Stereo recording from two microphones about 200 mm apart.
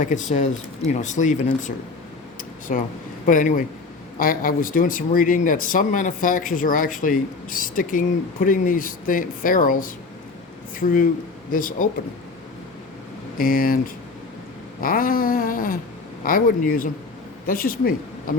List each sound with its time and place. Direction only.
0.0 s speech: 40° left (ahead or behind)
13.4 s speech: 45° left (ahead or behind)